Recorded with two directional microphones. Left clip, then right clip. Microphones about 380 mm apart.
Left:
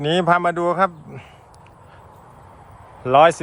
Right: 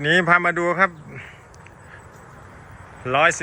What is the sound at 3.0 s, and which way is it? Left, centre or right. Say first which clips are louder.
Speech: left 5 dB; centre.